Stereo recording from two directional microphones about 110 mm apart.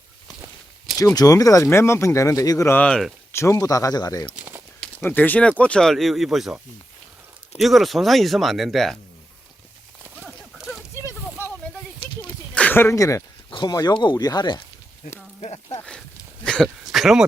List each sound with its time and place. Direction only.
0.9 s speech: 30° left (ahead or behind)
2.7 s speech: 10° left (ahead or behind)
3.3 s speech: 30° left (ahead or behind)
4.4 s walk: 20° right (ahead or behind)
4.9 s speech: 15° left (ahead or behind); by 6.6 s centre (ahead or behind)
7.6 s speech: centre (ahead or behind)
10.2 s horse: centre (ahead or behind)
11.0 s a sound: 20° left (ahead or behind)
12.5 s speech: 15° left (ahead or behind)
13.5 s a sound: 45° left (ahead or behind)
13.8 s speech: 45° left (ahead or behind)
15.4 s speech: 70° left (ahead or behind)
15.9 s a sound: 5° left (ahead or behind)